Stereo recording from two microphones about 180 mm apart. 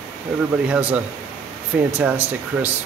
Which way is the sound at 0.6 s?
10° right (ahead or behind).